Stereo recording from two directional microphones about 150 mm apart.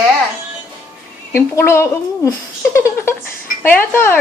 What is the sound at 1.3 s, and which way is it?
A woman's voice, 15° left (ahead or behind).